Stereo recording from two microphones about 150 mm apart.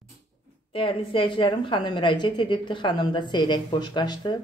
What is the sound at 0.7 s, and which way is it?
A woman's voice, 35° left (ahead or behind).